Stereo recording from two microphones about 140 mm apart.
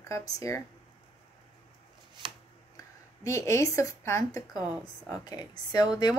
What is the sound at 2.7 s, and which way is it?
A woman's voice, 20° left (ahead or behind).